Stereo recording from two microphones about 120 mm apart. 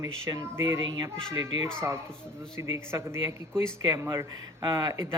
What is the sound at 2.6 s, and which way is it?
A child's voice, 20° right (ahead or behind).